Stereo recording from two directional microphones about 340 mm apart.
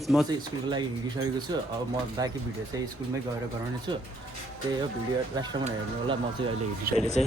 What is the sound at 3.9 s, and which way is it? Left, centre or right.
Speech, centre.